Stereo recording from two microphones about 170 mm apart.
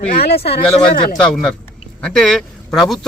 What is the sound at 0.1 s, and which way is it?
Speech, 65° left (ahead or behind).